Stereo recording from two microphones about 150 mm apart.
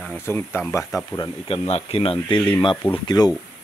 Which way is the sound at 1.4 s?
40° left (ahead or behind).